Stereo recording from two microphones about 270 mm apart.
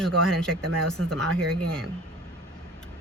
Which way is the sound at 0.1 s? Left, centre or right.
Right.